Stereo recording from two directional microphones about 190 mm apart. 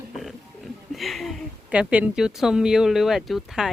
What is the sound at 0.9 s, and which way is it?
Speech, centre (ahead or behind).